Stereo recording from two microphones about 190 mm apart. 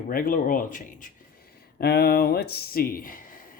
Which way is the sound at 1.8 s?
55° left (ahead or behind).